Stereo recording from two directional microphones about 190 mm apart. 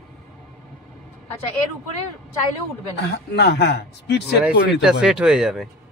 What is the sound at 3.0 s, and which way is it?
A man's voice, 60° left (ahead or behind).